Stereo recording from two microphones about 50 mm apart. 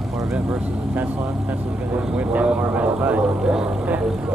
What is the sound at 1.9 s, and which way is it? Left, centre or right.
Vehicle, right.